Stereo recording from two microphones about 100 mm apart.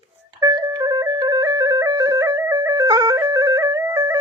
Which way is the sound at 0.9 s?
40° right (ahead or behind).